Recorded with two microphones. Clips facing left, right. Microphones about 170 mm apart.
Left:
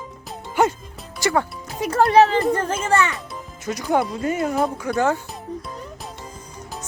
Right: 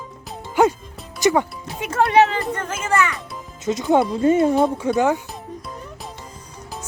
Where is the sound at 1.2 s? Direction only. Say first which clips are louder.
Right 3 dB; 20° right (ahead or behind).